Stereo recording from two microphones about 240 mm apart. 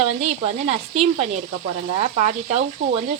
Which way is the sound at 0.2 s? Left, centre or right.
Right.